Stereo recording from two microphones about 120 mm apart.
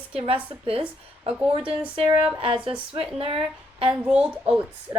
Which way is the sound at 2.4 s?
45° right (ahead or behind).